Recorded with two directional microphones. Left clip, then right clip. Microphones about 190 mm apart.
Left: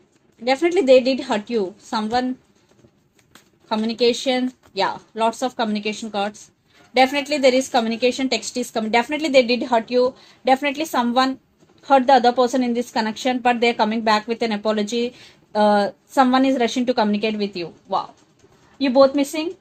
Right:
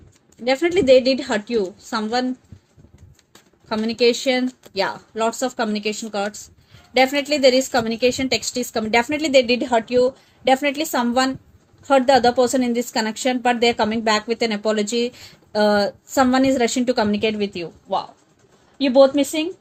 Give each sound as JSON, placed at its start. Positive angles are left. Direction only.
{"t": 0.4, "sound": "speech", "side_deg": -35}
{"t": 3.7, "sound": "speech", "side_deg": -40}